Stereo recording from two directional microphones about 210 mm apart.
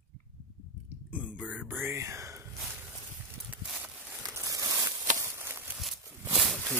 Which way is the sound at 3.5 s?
5° right (ahead or behind).